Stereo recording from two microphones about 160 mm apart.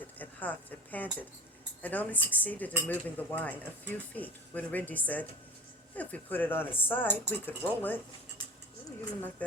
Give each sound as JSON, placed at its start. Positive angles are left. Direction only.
{"t": 0.2, "sound": "speech", "side_deg": 10}